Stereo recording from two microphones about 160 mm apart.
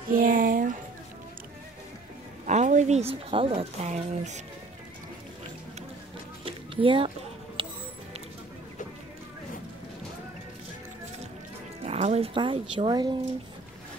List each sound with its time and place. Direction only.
0.1 s a sound: 60° right (ahead or behind)
2.4 s a woman's voice: 50° right (ahead or behind)
6.4 s music: 35° right (ahead or behind)
11.8 s speech: 40° right (ahead or behind)